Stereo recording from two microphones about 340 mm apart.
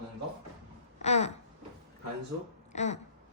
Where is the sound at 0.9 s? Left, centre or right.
Centre.